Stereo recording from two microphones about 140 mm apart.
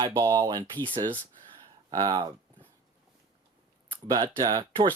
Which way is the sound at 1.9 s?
30° right (ahead or behind).